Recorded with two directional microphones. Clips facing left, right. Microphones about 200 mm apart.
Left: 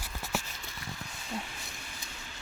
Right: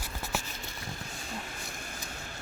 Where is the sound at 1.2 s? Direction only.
45° right (ahead or behind).